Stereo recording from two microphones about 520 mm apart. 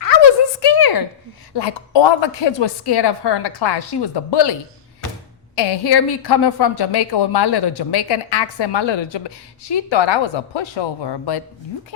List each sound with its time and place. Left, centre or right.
0.0 s a sound: left
1.5 s a woman's voice: left
5.5 s a woman's voice: left